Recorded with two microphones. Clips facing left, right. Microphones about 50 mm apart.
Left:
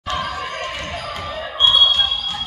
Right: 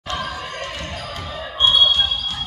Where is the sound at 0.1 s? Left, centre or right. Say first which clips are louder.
Left 3 dB; left.